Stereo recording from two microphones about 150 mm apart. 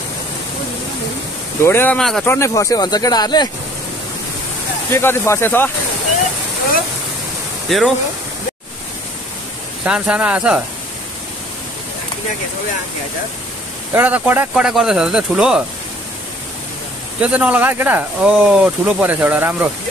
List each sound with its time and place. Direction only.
1.6 s speech: 15° left (ahead or behind)
2.0 s speech: centre (ahead or behind)
2.2 s speech: 20° left (ahead or behind)
4.9 s speech: 15° left (ahead or behind)
7.7 s speech: centre (ahead or behind)
9.8 s speech: 5° right (ahead or behind)
13.9 s speech: 10° right (ahead or behind)
17.2 s speech: 10° right (ahead or behind)